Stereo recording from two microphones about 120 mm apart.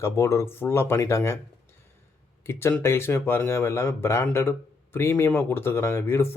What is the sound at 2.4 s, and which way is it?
Speech, 20° left (ahead or behind).